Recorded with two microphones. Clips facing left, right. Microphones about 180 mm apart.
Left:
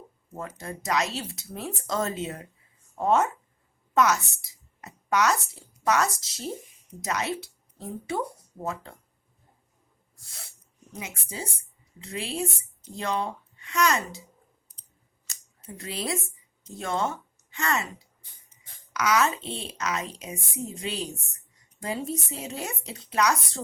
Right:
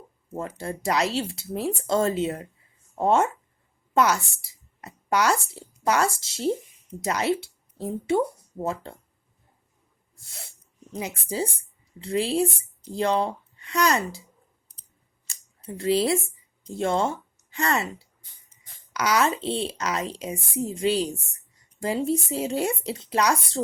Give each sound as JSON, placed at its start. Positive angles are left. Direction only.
{"t": 0.3, "sound": "a woman's voice", "side_deg": -30}
{"t": 10.9, "sound": "speech", "side_deg": -35}
{"t": 15.3, "sound": "a sound", "side_deg": -30}
{"t": 16.7, "sound": "speech", "side_deg": -30}